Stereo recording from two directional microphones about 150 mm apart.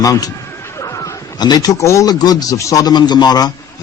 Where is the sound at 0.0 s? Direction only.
20° left (ahead or behind).